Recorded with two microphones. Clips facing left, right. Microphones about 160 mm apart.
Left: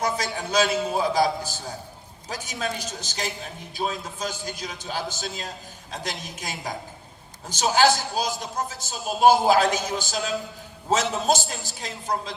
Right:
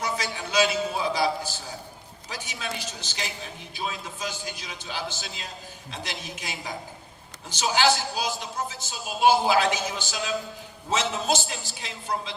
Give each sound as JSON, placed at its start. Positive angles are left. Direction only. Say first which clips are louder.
{"t": 0.0, "sound": "a man's voice", "louder": "left 3 dB", "side_deg": 45}
{"t": 2.3, "sound": "a man's voice", "louder": "left 4 dB", "side_deg": 45}